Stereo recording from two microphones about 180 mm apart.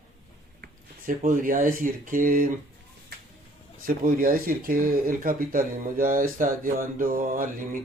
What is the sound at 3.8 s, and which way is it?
Speech, 50° right (ahead or behind).